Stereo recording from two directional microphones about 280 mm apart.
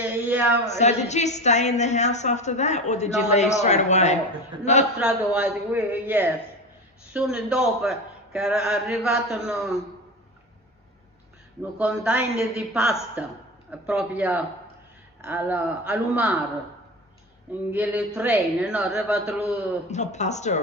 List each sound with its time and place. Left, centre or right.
0.0 s speech: centre
0.7 s a woman's voice: left
4.9 s speech: centre
11.8 s speech: centre
17.7 s speech: centre
19.9 s a woman's voice: left